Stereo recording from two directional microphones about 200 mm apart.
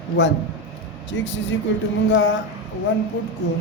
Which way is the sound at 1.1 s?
65° left (ahead or behind).